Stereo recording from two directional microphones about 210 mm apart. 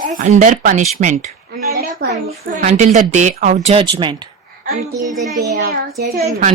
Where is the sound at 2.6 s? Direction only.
35° right (ahead or behind).